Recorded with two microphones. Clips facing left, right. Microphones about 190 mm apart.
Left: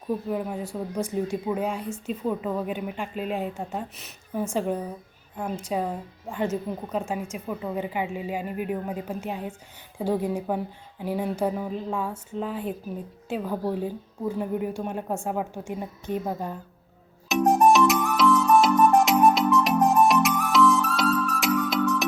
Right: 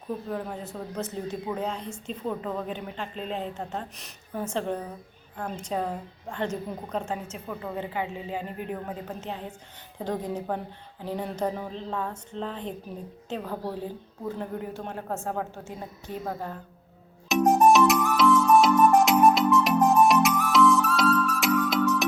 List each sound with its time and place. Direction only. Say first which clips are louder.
0.3 s speech: left 4 dB; 10° left (ahead or behind)
17.2 s music: even; centre (ahead or behind)